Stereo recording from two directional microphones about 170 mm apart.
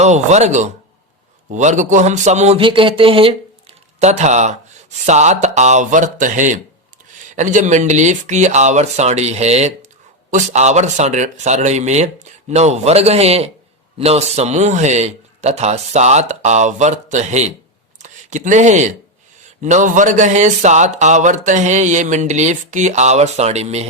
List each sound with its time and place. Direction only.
0.0 s a man's voice: 40° right (ahead or behind)